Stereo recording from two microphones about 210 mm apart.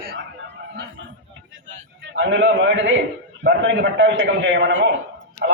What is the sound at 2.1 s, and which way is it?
A man's voice, 60° right (ahead or behind).